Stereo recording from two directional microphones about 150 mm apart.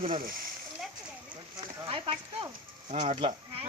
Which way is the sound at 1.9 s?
35° right (ahead or behind).